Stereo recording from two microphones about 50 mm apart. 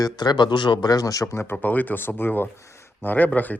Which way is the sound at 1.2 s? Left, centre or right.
Left.